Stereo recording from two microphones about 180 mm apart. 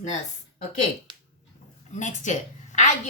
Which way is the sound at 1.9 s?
40° left (ahead or behind).